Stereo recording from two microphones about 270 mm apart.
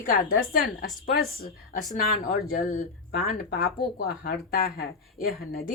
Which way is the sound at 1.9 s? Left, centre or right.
Left.